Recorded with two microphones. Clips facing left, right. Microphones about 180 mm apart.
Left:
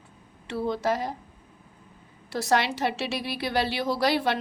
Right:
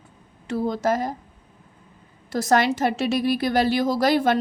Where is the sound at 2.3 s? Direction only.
45° right (ahead or behind).